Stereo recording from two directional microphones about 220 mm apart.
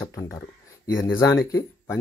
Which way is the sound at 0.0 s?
15° left (ahead or behind).